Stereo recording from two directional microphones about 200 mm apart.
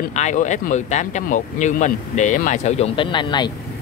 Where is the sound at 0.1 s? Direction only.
35° left (ahead or behind).